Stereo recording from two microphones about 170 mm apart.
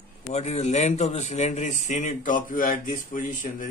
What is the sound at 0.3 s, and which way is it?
A man's voice, 40° left (ahead or behind).